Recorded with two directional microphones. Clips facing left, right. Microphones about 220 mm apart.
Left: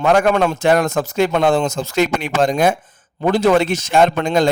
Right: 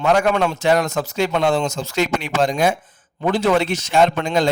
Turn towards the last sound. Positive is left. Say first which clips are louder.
# left 2 dB
turn(degrees=45)  # may be behind; listen again after turning